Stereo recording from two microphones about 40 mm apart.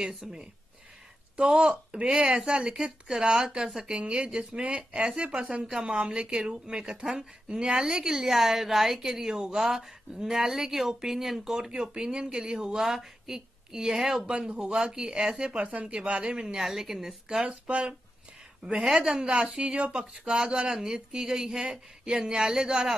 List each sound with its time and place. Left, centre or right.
0.2 s a woman's voice: centre
3.9 s a woman's voice: right
17.5 s speech: right
18.7 s a woman's voice: centre